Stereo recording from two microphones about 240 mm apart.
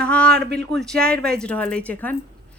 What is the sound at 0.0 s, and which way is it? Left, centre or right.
Speech, centre.